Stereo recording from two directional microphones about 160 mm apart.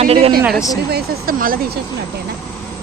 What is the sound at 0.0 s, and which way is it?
Speech, 40° right (ahead or behind).